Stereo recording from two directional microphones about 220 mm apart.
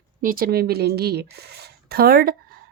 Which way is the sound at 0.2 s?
40° right (ahead or behind).